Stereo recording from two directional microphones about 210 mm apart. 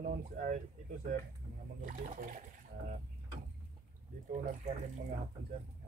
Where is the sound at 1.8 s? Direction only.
40° right (ahead or behind).